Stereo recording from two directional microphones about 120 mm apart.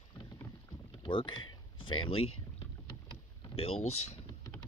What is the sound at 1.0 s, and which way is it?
Speech, 40° left (ahead or behind).